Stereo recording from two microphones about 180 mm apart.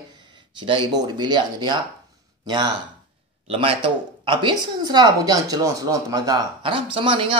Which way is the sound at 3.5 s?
30° right (ahead or behind).